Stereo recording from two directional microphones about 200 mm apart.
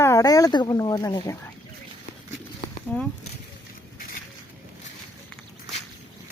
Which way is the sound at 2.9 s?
5° left (ahead or behind).